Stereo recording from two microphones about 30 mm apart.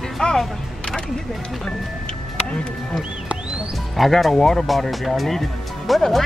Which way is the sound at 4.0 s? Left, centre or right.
Centre.